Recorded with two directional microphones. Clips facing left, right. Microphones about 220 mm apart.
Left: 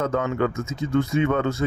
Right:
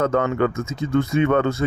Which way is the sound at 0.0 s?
65° right (ahead or behind).